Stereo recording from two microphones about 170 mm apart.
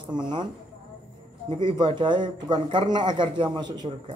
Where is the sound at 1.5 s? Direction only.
25° right (ahead or behind).